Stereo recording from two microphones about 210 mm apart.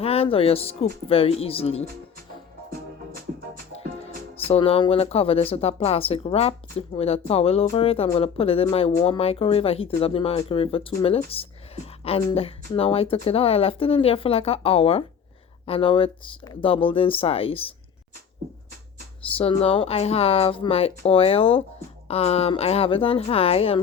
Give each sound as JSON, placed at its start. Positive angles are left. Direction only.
{"t": 0.0, "sound": "speech", "side_deg": 30}
{"t": 4.4, "sound": "speech", "side_deg": 25}
{"t": 19.4, "sound": "speech", "side_deg": 25}